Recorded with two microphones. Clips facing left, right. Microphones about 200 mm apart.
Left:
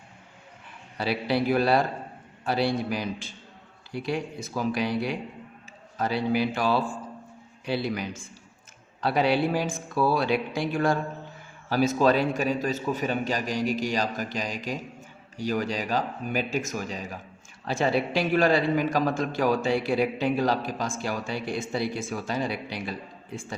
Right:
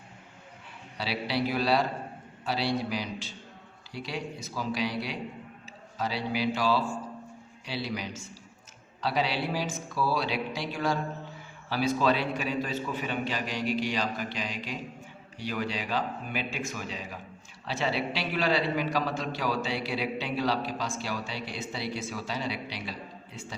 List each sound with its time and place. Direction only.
0.9 s a man's voice: 50° left (ahead or behind)